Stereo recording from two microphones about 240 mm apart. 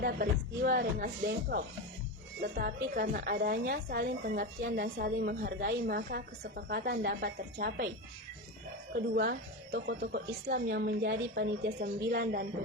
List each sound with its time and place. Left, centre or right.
0.0 s a woman's voice: right
9.1 s a woman's voice: right